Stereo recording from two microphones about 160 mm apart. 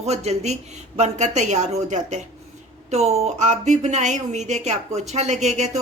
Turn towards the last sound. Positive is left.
turn(degrees=-45)  # may be behind; listen again after turning